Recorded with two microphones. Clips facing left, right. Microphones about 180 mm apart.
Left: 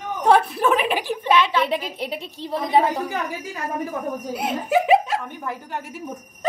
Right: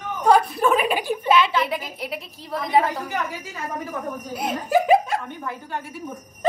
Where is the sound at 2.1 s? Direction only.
25° left (ahead or behind).